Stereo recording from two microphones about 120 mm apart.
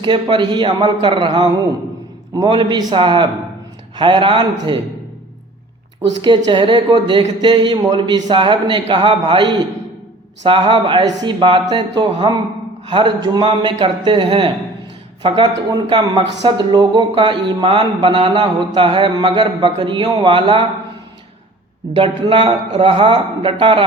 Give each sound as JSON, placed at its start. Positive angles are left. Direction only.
{"t": 0.0, "sound": "a man's voice", "side_deg": -40}
{"t": 6.2, "sound": "a man's voice", "side_deg": -40}
{"t": 21.9, "sound": "a man's voice", "side_deg": -45}
{"t": 22.7, "sound": "a man's voice", "side_deg": -55}